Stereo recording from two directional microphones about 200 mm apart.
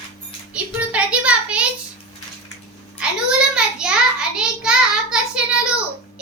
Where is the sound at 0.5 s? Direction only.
5° right (ahead or behind).